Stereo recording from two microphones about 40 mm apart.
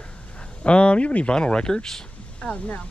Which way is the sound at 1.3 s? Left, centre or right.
Left.